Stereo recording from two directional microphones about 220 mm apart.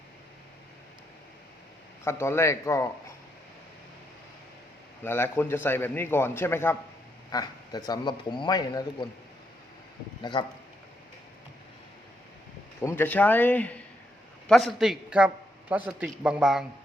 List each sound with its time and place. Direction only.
2.0 s a man's voice: 10° left (ahead or behind)
5.0 s a man's voice: 10° left (ahead or behind)
10.3 s a man's voice: 20° left (ahead or behind)
12.8 s a man's voice: 10° left (ahead or behind)